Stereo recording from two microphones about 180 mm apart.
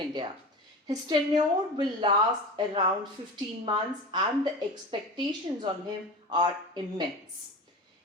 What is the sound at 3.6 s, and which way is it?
A woman's voice, 25° right (ahead or behind).